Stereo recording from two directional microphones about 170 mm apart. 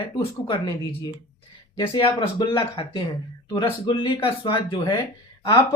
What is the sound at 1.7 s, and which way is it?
Speech, 30° left (ahead or behind).